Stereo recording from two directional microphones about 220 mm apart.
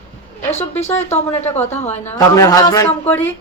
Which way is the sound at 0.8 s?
30° left (ahead or behind).